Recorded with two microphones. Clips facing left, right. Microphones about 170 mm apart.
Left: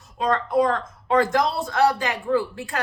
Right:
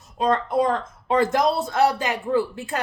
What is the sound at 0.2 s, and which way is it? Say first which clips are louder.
Speech: even; 20° right (ahead or behind).